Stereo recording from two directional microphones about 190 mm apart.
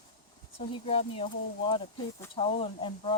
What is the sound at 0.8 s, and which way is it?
Speech, 30° left (ahead or behind).